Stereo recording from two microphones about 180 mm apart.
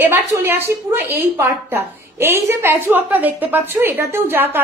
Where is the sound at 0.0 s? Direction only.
10° right (ahead or behind).